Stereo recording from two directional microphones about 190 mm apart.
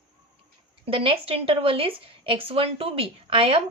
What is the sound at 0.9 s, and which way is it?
Speech, 30° right (ahead or behind).